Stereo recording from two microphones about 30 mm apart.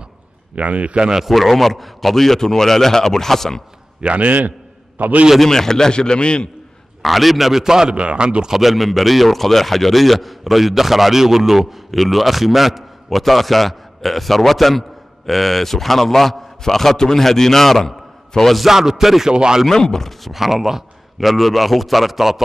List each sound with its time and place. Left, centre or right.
0.6 s speech: right
1.3 s a man's voice: centre
4.0 s speech: right
4.3 s a sound: right
5.4 s a man's voice: centre; by 6.5 s left
7.0 s a man's voice: centre
7.6 s a man's voice: centre
7.9 s a man's voice: right
8.5 s a man's voice: centre
18.7 s speech: centre
19.3 s a man's voice: right
19.7 s a man's voice: centre
20.1 s a man's voice: centre